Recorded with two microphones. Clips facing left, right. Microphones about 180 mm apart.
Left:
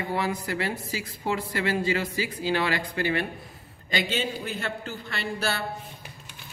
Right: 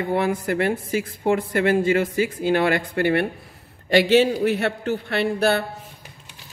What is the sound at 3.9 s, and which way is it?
A man's voice, 70° right (ahead or behind).